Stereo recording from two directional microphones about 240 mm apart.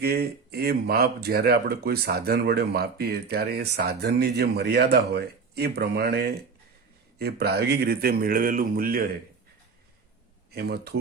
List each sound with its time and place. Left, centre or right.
0.0 s speech: right
10.5 s speech: right